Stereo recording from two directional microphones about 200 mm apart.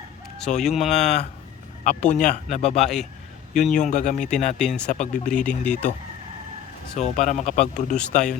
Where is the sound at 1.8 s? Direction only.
35° left (ahead or behind).